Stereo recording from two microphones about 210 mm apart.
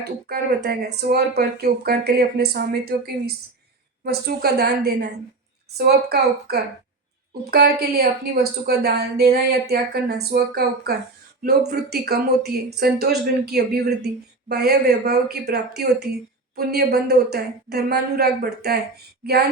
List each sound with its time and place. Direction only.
0.0 s speech: 50° right (ahead or behind)